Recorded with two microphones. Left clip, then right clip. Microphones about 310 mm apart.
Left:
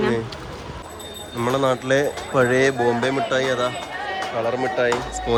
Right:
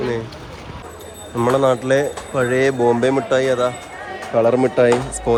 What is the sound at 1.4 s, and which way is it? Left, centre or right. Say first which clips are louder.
Speech: right 5 dB; centre.